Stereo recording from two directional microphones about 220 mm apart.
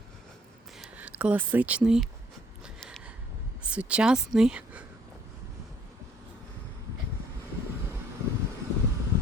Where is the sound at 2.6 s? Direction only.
Centre (ahead or behind).